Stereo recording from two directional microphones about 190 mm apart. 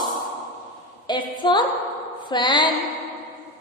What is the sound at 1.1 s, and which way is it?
A woman's voice, 25° left (ahead or behind).